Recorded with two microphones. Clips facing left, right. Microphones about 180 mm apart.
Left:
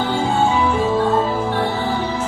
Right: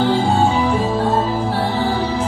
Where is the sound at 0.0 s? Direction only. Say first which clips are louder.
Right 3 dB; 35° right (ahead or behind).